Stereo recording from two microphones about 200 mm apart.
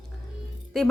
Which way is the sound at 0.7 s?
Centre (ahead or behind).